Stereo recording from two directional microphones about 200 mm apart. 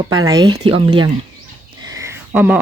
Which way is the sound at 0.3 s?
20° right (ahead or behind).